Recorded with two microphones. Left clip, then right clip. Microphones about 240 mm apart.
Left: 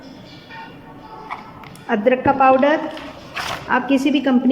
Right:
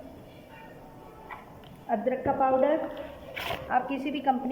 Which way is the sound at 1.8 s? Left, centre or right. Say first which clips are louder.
Left 11 dB; left.